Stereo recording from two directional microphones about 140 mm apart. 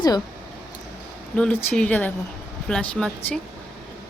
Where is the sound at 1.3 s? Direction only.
10° left (ahead or behind).